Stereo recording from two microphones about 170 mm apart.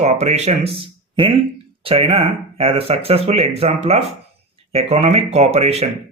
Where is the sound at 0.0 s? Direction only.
40° right (ahead or behind).